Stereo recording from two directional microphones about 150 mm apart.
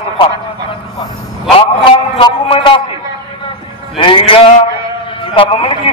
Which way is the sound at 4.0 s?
35° left (ahead or behind).